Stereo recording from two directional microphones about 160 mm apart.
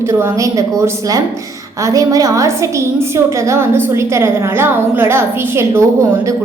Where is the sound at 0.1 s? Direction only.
20° right (ahead or behind).